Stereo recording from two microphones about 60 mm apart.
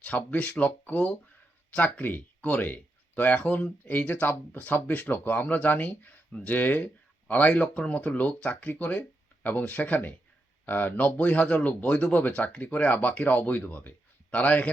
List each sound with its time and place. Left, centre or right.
0.0 s speech: left